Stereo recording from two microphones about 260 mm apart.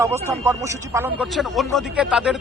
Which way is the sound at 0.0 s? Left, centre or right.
Centre.